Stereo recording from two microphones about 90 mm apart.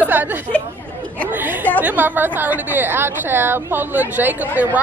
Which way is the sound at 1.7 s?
20° right (ahead or behind).